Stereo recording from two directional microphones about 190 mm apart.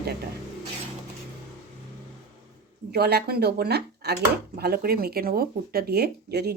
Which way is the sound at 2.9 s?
55° right (ahead or behind).